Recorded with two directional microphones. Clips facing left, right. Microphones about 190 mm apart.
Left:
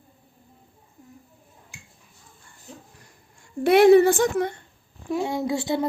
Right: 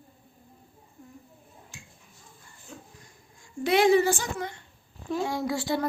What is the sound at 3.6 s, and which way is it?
Speech, 60° left (ahead or behind).